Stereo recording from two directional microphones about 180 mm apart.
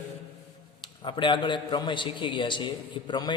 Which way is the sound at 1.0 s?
25° left (ahead or behind).